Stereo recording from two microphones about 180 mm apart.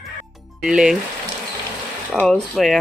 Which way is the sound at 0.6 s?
5° right (ahead or behind).